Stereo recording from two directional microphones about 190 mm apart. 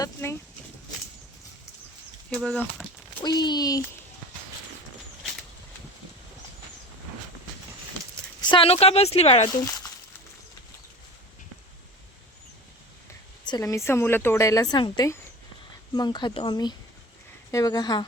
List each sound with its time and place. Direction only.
0.0 s a sound: 15° left (ahead or behind)
2.3 s speech: 5° left (ahead or behind)
3.2 s speech: 20° left (ahead or behind)
8.4 s a woman's voice: 30° left (ahead or behind)
13.4 s speech: 20° left (ahead or behind)